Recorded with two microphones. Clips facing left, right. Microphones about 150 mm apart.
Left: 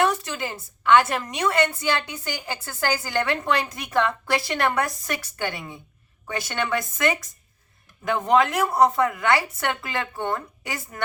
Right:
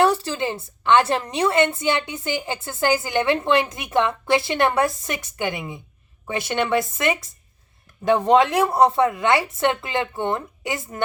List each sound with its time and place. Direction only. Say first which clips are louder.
0.0 s a woman's voice: right 4 dB; 30° right (ahead or behind)